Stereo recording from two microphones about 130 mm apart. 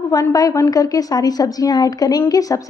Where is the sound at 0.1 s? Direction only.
25° left (ahead or behind).